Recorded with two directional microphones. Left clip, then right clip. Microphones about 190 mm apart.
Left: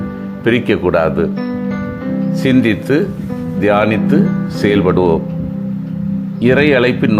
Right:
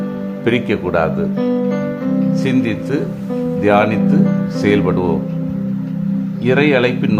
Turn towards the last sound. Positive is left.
turn(degrees=20)  # may be behind; listen again after turning